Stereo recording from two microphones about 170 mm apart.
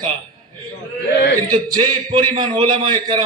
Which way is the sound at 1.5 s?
25° right (ahead or behind).